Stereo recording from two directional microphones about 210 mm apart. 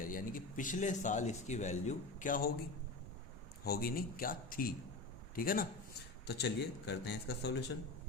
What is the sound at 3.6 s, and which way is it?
A man's voice, 45° left (ahead or behind).